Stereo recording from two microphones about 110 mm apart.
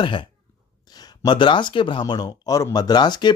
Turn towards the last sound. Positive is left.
turn(degrees=40)  # may be behind; listen again after turning